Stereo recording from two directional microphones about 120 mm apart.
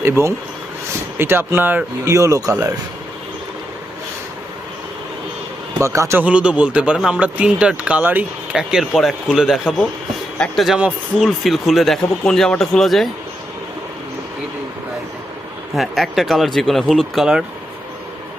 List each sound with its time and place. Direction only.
0.0 s speech: 20° right (ahead or behind)
5.8 s speech: 25° right (ahead or behind)
6.2 s speech: 10° right (ahead or behind)
15.7 s speech: centre (ahead or behind)